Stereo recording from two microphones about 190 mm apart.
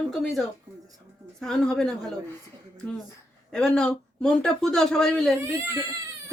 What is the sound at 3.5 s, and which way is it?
Speech, 5° left (ahead or behind).